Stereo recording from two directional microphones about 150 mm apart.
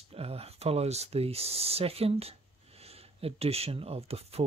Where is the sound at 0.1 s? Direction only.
40° right (ahead or behind).